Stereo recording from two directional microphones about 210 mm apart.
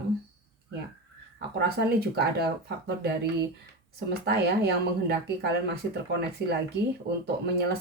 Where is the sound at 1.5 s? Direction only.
50° right (ahead or behind).